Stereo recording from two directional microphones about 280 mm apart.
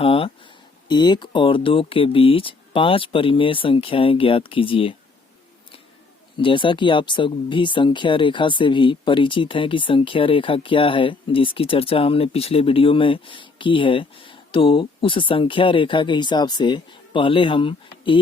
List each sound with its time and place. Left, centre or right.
0.0 s speech: centre
6.3 s speech: centre